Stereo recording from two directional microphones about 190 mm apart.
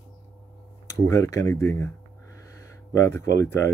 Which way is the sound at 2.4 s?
15° left (ahead or behind).